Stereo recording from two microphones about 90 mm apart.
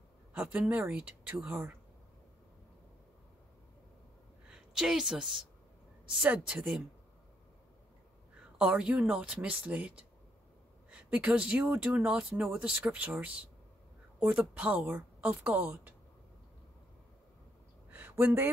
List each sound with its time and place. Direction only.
0.3 s a woman's voice: 15° right (ahead or behind)
4.5 s a woman's voice: 5° right (ahead or behind)
8.5 s a woman's voice: 10° right (ahead or behind)
17.9 s a sound: 20° right (ahead or behind)